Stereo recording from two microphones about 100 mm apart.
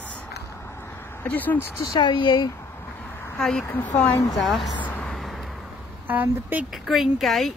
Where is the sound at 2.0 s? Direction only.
50° left (ahead or behind).